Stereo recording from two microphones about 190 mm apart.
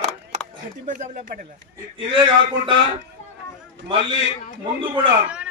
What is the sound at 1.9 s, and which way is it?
Speech, 30° right (ahead or behind).